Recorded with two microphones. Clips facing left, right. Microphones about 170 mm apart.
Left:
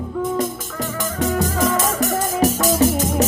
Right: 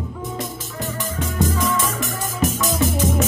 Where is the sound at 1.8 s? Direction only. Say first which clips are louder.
Left 5 dB; 40° left (ahead or behind).